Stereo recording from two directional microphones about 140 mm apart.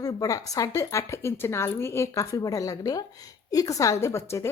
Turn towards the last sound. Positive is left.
turn(degrees=20)  # may be behind; listen again after turning